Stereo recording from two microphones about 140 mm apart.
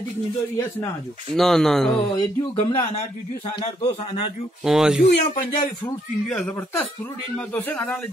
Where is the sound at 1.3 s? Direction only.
Centre (ahead or behind).